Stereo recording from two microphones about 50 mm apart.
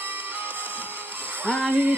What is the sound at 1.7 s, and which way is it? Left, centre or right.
Music, right.